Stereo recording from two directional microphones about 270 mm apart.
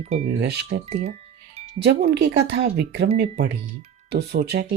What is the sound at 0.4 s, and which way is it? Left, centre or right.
Speech, right.